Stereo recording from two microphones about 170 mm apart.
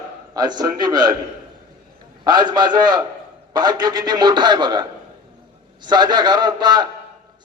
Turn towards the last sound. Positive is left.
turn(degrees=-25)  # may be behind; listen again after turning